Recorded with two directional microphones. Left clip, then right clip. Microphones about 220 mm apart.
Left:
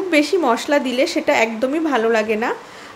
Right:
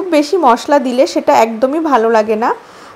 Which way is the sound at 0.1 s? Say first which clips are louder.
Right 6 dB; 15° right (ahead or behind).